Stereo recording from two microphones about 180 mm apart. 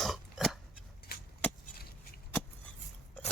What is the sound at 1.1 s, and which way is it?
Vehicle, 60° left (ahead or behind).